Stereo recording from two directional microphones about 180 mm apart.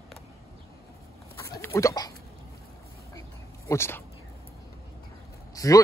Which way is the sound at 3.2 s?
15° left (ahead or behind).